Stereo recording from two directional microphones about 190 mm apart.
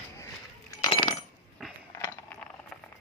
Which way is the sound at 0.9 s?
30° left (ahead or behind).